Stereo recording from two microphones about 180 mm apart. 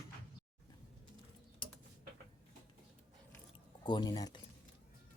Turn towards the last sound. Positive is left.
turn(degrees=20)  # may be behind; listen again after turning